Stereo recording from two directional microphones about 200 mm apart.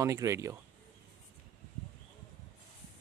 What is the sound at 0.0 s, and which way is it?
Speech, 15° right (ahead or behind).